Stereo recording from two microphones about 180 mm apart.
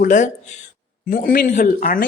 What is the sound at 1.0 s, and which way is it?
Speech, 50° left (ahead or behind).